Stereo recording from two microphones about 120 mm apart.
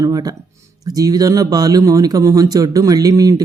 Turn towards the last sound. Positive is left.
turn(degrees=-30)  # may be behind; listen again after turning